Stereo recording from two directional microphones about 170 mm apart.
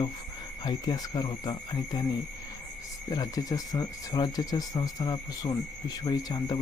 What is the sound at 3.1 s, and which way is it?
Speech, 20° left (ahead or behind).